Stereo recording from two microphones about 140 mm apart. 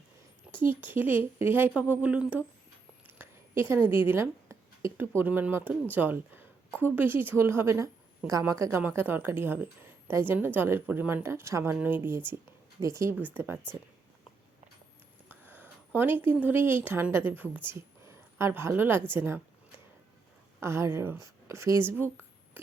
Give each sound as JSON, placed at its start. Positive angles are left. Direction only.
{"t": 0.5, "sound": "a woman's voice", "side_deg": -15}
{"t": 15.3, "sound": "a woman's voice", "side_deg": -15}
{"t": 20.6, "sound": "speech", "side_deg": -20}